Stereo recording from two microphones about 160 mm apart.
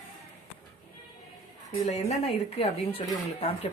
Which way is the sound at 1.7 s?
45° left (ahead or behind).